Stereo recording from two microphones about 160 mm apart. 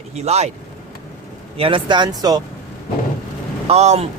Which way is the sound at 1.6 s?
30° right (ahead or behind).